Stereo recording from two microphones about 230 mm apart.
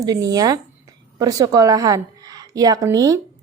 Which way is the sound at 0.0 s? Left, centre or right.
Centre.